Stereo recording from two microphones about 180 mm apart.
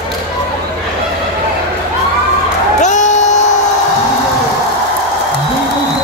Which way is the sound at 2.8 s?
40° left (ahead or behind).